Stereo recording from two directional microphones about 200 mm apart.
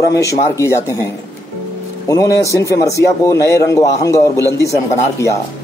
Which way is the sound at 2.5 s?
15° left (ahead or behind).